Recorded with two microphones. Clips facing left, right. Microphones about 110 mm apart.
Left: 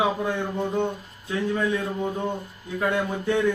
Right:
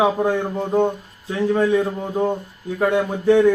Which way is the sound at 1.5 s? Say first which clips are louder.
Right 9 dB; 35° right (ahead or behind).